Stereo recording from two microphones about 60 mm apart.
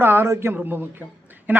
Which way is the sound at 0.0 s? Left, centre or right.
Right.